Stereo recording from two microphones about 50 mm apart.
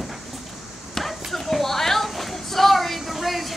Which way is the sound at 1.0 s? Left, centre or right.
Centre.